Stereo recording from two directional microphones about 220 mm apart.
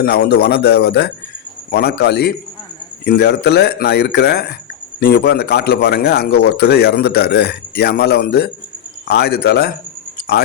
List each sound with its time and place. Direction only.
0.0 s a man's voice: 45° left (ahead or behind)